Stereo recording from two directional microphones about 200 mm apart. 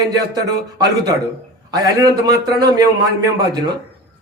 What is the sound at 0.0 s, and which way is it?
A man's voice, 20° right (ahead or behind).